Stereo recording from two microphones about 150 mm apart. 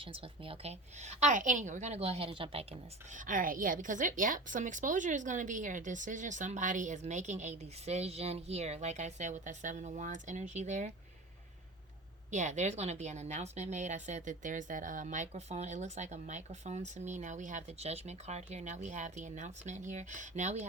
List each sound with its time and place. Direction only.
0.0 s a woman's voice: 35° right (ahead or behind)
3.2 s a woman's voice: 65° right (ahead or behind)
12.3 s a woman's voice: 50° right (ahead or behind)